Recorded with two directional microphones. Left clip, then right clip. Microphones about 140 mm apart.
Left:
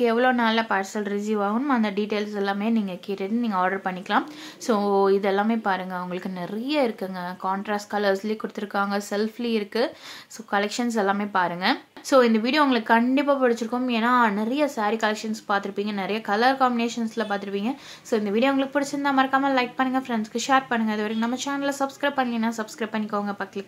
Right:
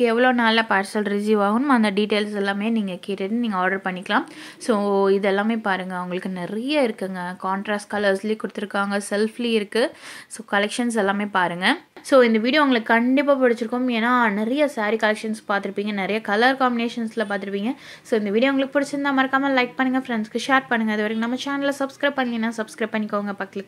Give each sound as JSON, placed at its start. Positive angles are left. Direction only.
{"t": 0.0, "sound": "a woman's voice", "side_deg": -25}